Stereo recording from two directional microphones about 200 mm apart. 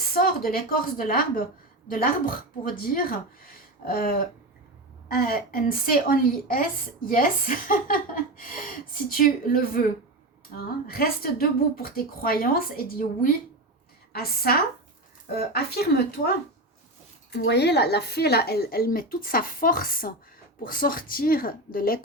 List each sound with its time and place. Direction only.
0.1 s a woman's voice: 50° left (ahead or behind)
15.5 s a woman's voice: 50° left (ahead or behind)
17.3 s a woman's voice: 55° left (ahead or behind)